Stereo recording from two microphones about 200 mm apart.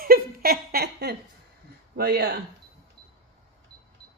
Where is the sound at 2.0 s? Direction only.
55° right (ahead or behind).